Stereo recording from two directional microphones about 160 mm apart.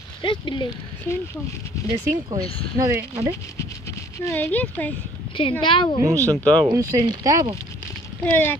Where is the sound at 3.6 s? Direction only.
20° left (ahead or behind).